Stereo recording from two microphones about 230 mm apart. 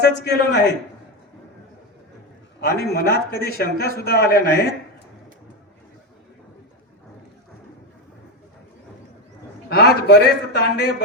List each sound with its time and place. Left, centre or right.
0.0 s a man's voice: left
2.6 s a man's voice: left
9.6 s a man's voice: left